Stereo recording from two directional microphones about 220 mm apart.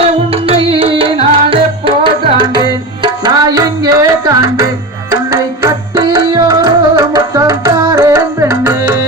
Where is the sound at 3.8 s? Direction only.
15° right (ahead or behind).